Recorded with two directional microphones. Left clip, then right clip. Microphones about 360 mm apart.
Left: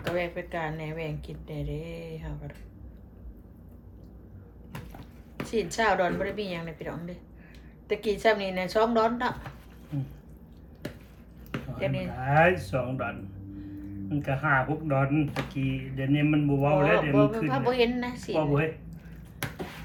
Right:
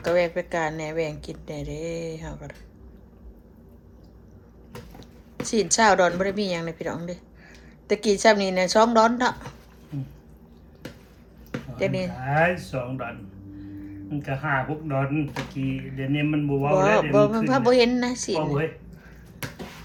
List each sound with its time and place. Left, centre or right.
0.2 s a woman's voice: centre
5.4 s a woman's voice: centre
11.8 s a woman's voice: centre
12.1 s speech: centre
14.2 s speech: centre
16.7 s a woman's voice: centre